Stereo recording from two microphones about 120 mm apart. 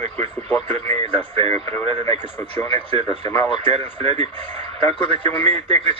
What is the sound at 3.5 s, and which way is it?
Speech, 55° right (ahead or behind).